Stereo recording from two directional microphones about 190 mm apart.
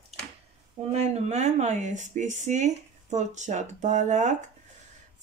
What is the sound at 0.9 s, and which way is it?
Speech, 35° right (ahead or behind).